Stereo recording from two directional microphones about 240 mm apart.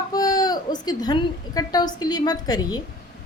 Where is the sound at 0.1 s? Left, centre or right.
Centre.